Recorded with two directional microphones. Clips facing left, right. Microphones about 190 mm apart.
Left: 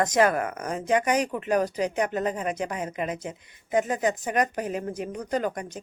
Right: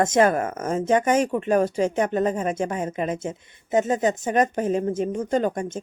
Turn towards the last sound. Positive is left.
turn(degrees=-25)  # may be behind; listen again after turning